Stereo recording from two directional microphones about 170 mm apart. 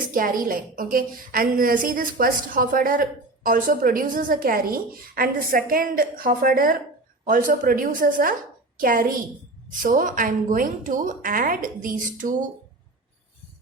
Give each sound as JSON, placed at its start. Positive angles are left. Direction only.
{"t": 0.1, "sound": "a woman's voice", "side_deg": -55}